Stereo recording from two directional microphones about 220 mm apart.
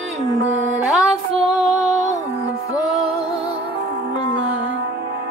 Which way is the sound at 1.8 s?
30° right (ahead or behind).